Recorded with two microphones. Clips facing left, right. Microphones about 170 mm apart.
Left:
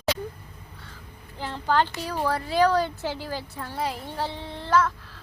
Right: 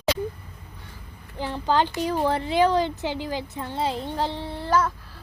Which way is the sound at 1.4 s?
15° right (ahead or behind).